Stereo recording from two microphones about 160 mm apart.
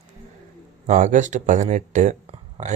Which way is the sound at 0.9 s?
55° right (ahead or behind).